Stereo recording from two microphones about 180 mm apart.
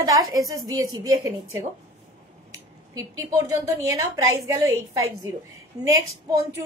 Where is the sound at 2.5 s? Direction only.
15° right (ahead or behind).